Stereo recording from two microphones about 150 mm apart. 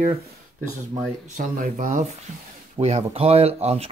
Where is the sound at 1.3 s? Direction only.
55° right (ahead or behind).